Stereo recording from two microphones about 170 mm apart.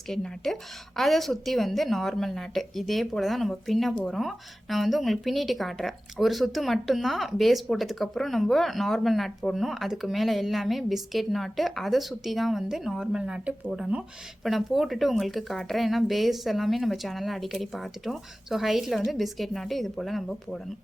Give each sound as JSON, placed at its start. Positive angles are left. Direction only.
{"t": 0.1, "sound": "a woman's voice", "side_deg": 0}